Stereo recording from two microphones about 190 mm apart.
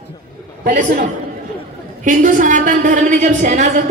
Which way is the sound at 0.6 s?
45° right (ahead or behind).